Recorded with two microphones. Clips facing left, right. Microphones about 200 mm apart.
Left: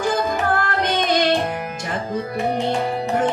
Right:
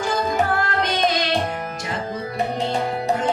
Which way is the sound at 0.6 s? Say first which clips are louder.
Even; 55° left (ahead or behind).